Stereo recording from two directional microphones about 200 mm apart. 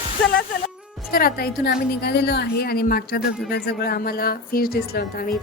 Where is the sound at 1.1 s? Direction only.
50° left (ahead or behind).